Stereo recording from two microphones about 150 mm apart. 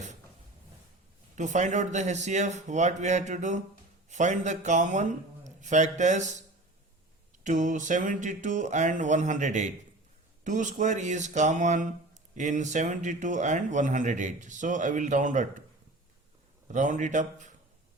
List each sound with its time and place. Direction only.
1.4 s a man's voice: 55° right (ahead or behind)
7.4 s speech: 55° right (ahead or behind)
16.7 s speech: 55° right (ahead or behind)